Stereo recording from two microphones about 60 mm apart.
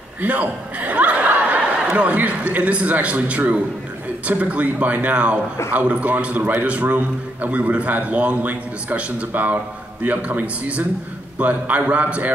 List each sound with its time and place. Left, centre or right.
0.2 s chuckle: right
1.9 s a man's voice: right